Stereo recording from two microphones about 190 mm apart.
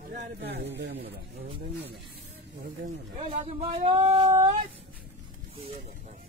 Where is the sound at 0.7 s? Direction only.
65° right (ahead or behind).